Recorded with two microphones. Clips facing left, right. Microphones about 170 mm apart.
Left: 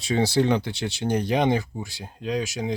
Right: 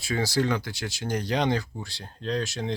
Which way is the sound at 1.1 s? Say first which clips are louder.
Left 3 dB; 15° left (ahead or behind).